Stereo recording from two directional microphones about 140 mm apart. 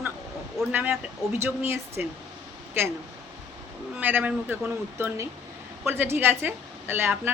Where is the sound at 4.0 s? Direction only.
10° right (ahead or behind).